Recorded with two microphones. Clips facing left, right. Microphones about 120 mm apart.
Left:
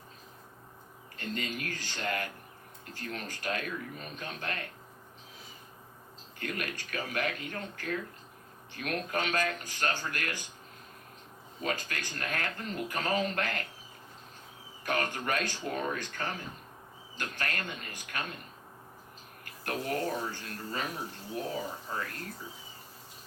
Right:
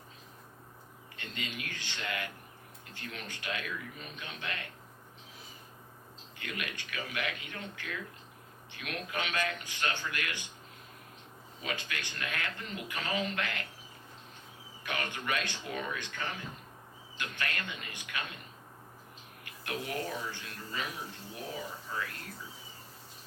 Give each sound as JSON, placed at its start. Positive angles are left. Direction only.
{"t": 1.1, "sound": "speech", "side_deg": 40}
{"t": 6.4, "sound": "speech", "side_deg": 40}
{"t": 11.6, "sound": "speech", "side_deg": 40}
{"t": 14.8, "sound": "speech", "side_deg": 40}
{"t": 19.5, "sound": "speech", "side_deg": 40}